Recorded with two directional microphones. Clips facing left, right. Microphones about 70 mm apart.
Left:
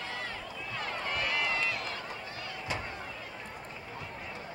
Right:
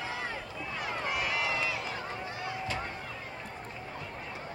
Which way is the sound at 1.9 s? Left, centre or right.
Right.